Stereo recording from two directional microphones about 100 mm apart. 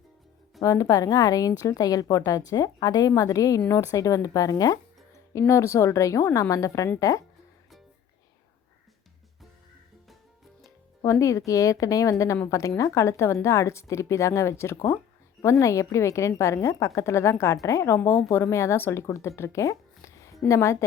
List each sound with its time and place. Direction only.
0.6 s a woman's voice: 35° left (ahead or behind)
11.0 s a woman's voice: 30° left (ahead or behind)
19.4 s a sound: 30° left (ahead or behind)
20.4 s a woman's voice: 30° left (ahead or behind)